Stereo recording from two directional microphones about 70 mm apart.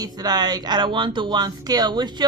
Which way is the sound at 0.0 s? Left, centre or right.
Right.